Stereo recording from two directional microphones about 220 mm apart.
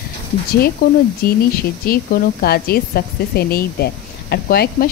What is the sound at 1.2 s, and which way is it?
A woman's voice, 45° left (ahead or behind).